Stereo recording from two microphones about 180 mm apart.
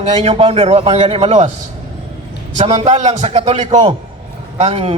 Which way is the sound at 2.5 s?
40° right (ahead or behind).